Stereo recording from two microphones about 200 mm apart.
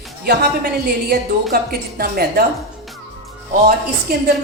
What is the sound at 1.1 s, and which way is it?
Speech, 50° right (ahead or behind).